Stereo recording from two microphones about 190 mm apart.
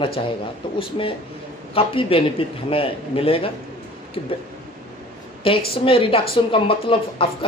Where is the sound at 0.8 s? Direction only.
30° left (ahead or behind).